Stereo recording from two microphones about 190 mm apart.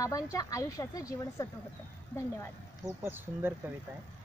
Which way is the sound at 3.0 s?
10° right (ahead or behind).